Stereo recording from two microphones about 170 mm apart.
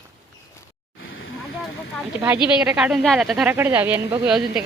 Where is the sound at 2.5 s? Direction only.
5° right (ahead or behind).